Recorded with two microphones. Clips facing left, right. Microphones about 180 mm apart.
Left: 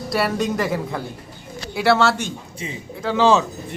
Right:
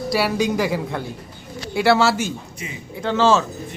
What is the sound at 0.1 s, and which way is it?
A man's voice, centre (ahead or behind).